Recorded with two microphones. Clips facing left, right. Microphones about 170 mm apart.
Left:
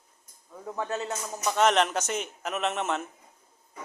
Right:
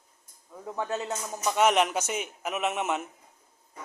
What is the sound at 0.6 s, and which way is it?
Speech, 15° right (ahead or behind).